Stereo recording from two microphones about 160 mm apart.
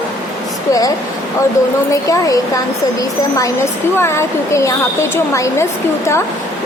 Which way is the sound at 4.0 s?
15° left (ahead or behind).